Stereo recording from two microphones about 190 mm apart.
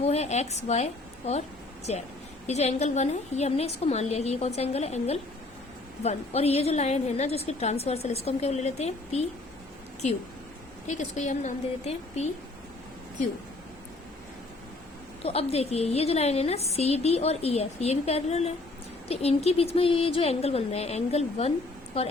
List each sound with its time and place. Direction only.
0.0 s a woman's voice: 35° left (ahead or behind)
2.5 s a woman's voice: 35° left (ahead or behind)
10.8 s a woman's voice: 40° left (ahead or behind)
15.2 s a woman's voice: 30° left (ahead or behind)